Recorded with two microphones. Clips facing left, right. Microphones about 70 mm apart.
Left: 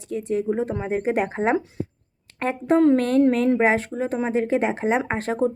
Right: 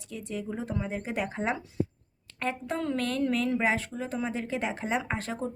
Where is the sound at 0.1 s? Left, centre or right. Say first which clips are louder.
Left 12 dB; left.